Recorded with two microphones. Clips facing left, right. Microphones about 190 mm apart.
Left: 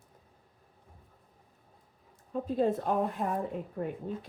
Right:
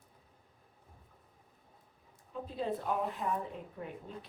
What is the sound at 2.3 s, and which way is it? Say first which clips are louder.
A woman's voice: left 8 dB; 45° left (ahead or behind).